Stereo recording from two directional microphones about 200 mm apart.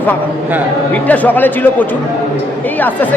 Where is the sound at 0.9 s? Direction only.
5° left (ahead or behind).